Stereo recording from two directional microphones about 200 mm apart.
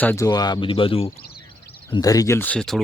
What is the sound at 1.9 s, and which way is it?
Speech, 20° left (ahead or behind).